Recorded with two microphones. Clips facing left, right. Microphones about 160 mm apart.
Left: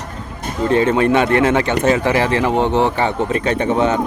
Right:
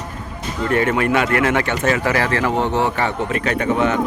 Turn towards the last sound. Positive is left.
turn(degrees=25)  # may be behind; listen again after turning